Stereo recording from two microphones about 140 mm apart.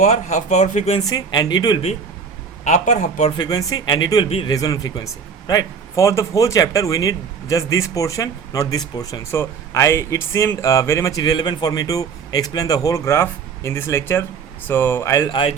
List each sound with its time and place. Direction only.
0.0 s speech: 55° left (ahead or behind)
1.0 s speech: 30° left (ahead or behind)
2.6 s speech: 60° left (ahead or behind)
3.3 s speech: 30° left (ahead or behind)
4.3 s speech: 45° left (ahead or behind)
4.5 s speech: 25° left (ahead or behind)